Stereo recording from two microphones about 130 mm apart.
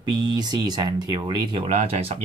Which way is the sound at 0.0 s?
30° right (ahead or behind).